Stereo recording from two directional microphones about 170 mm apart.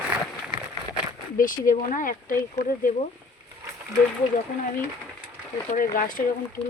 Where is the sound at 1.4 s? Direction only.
55° left (ahead or behind).